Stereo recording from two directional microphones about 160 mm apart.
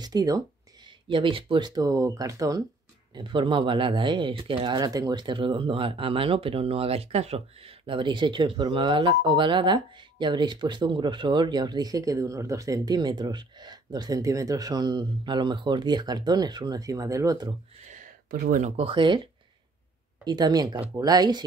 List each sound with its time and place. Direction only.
0.0 s speech: 25° right (ahead or behind)
18.3 s speech: 65° right (ahead or behind)
18.8 s speech: 30° right (ahead or behind)
20.2 s speech: 25° right (ahead or behind)